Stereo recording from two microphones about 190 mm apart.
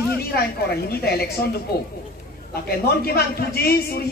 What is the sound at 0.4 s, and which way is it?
Speech, 55° left (ahead or behind).